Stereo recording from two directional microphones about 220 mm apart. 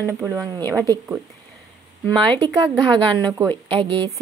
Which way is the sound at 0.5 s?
15° right (ahead or behind).